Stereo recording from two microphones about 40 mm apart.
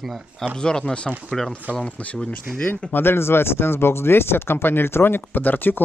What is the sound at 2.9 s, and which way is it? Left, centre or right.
Speech, left.